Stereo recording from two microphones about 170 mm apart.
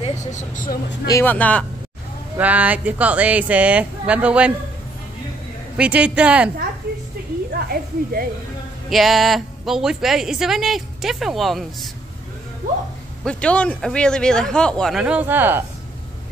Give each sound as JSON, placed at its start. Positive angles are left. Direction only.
{"t": 0.0, "sound": "speech", "side_deg": 45}
{"t": 1.0, "sound": "speech", "side_deg": 15}
{"t": 2.3, "sound": "speech", "side_deg": -10}
{"t": 5.8, "sound": "speech", "side_deg": -5}
{"t": 7.5, "sound": "a sound", "side_deg": -60}
{"t": 8.9, "sound": "speech", "side_deg": 0}
{"t": 13.2, "sound": "speech", "side_deg": 5}